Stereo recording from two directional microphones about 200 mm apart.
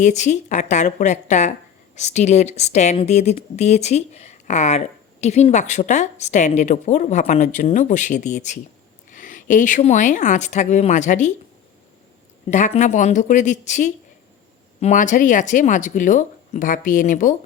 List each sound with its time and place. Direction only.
0.0 s speech: 35° left (ahead or behind)
12.5 s speech: 35° left (ahead or behind)